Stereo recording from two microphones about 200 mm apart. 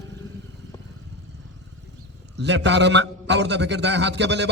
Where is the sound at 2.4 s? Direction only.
60° right (ahead or behind).